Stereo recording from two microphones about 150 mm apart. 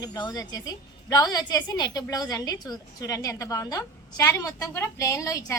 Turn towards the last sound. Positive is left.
turn(degrees=20)  # may be behind; listen again after turning